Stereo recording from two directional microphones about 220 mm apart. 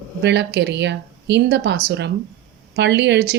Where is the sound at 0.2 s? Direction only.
50° right (ahead or behind).